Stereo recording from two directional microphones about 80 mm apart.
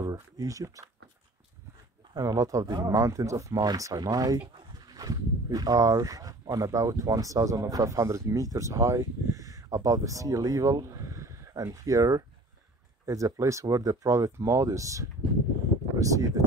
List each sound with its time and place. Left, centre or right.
0.0 s speech: right
2.1 s speech: right
3.5 s speech: right